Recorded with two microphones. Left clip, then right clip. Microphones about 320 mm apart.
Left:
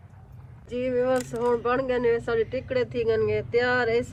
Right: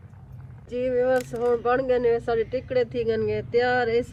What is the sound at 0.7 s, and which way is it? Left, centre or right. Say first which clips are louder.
Speech: right 2 dB; centre.